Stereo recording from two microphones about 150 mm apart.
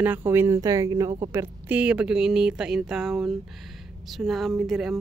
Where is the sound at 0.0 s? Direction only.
15° right (ahead or behind).